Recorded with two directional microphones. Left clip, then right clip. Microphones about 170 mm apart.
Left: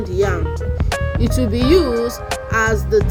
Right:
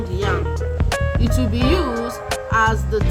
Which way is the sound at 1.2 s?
20° left (ahead or behind).